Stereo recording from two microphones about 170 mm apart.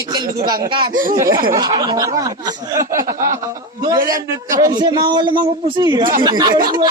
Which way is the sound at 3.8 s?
20° right (ahead or behind).